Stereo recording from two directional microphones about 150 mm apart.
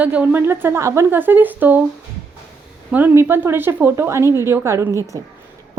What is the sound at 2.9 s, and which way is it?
A woman's voice, 10° right (ahead or behind).